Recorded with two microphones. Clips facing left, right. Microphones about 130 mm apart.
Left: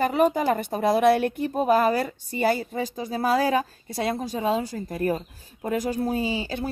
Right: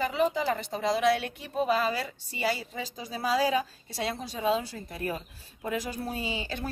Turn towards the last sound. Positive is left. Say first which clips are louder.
# left 7 dB
turn(degrees=35)  # may be behind; listen again after turning